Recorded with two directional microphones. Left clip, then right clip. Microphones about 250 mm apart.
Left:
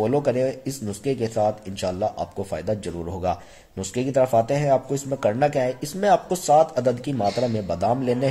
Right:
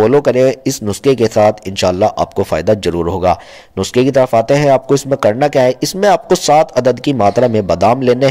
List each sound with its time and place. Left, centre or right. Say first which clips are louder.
0.0 s speech: right 12 dB; right